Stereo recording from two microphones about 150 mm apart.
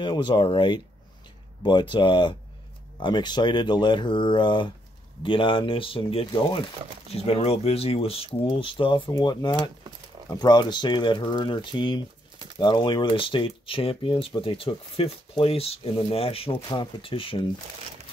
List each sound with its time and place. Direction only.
0.0 s speech: 30° left (ahead or behind)